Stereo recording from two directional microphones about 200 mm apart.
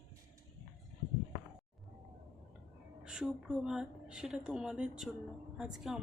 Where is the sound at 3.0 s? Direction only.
5° right (ahead or behind).